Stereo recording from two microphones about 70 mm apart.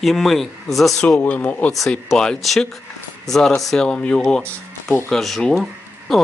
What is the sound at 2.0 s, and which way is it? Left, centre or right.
Speech, centre.